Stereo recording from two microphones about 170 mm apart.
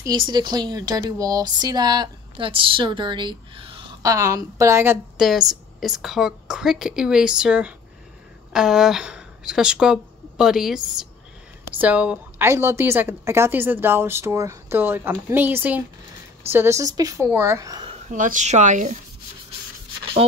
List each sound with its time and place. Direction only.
0.0 s speech: 25° right (ahead or behind)
4.1 s a woman's voice: 20° right (ahead or behind)
5.1 s a woman's voice: centre (ahead or behind); by 17.8 s 20° right (ahead or behind)
18.0 s speech: 50° right (ahead or behind)
20.2 s speech: 35° right (ahead or behind)